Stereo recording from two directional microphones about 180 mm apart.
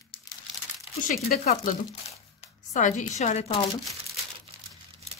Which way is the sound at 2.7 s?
45° left (ahead or behind).